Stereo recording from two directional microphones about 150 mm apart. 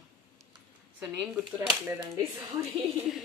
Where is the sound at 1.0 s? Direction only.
5° right (ahead or behind).